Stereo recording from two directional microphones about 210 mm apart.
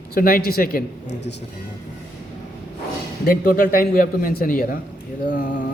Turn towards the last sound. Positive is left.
turn(degrees=40)  # may be behind; listen again after turning